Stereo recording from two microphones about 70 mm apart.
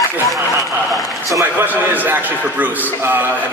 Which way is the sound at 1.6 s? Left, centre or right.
Right.